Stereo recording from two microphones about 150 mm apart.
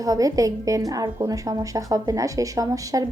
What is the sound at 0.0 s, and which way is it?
A woman's voice, 25° right (ahead or behind).